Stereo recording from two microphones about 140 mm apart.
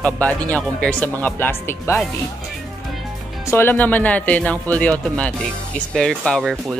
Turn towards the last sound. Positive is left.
turn(degrees=0)  # may be behind; listen again after turning